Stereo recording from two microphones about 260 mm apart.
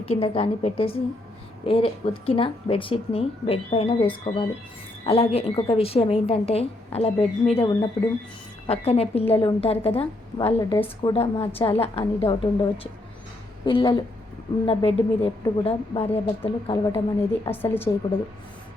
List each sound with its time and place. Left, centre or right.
0.0 s speech: left
11.1 s a woman's voice: left